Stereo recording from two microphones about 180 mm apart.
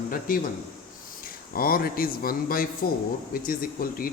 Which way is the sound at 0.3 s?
50° left (ahead or behind).